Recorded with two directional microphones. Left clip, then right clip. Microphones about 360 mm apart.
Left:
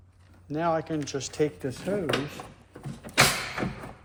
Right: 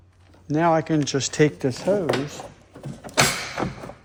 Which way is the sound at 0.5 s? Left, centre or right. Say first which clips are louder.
Right 7 dB; right.